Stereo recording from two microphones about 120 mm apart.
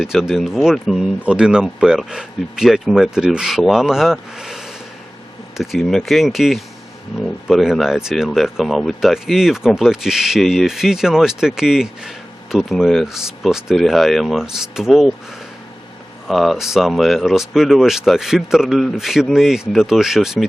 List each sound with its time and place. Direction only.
0.0 s speech: 5° right (ahead or behind)
16.2 s speech: centre (ahead or behind)